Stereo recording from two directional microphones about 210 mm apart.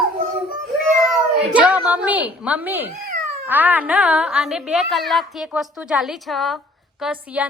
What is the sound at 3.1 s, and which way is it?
Cat, 40° right (ahead or behind).